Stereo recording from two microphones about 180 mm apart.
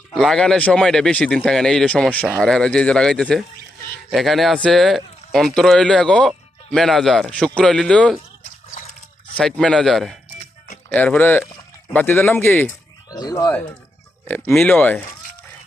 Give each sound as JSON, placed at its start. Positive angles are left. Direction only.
{"t": 0.1, "sound": "speech", "side_deg": 0}
{"t": 9.3, "sound": "speech", "side_deg": 0}
{"t": 14.3, "sound": "speech", "side_deg": 10}